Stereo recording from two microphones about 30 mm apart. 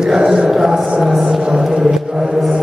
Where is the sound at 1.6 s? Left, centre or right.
Centre.